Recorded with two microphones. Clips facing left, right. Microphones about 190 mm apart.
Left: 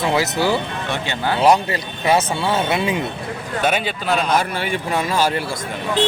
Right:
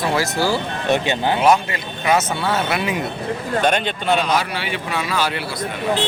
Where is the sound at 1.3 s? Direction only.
35° left (ahead or behind).